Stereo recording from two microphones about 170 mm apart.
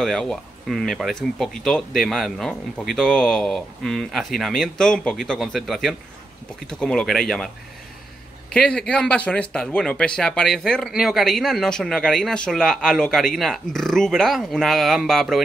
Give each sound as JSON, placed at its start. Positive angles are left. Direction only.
{"t": 0.0, "sound": "speech", "side_deg": 0}